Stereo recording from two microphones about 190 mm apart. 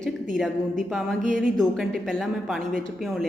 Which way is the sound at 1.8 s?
Centre (ahead or behind).